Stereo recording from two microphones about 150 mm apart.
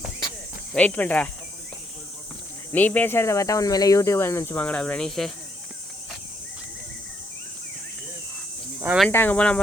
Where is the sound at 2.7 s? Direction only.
10° left (ahead or behind).